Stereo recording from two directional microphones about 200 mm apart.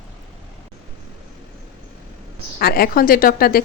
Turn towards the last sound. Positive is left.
turn(degrees=50)  # may be behind; listen again after turning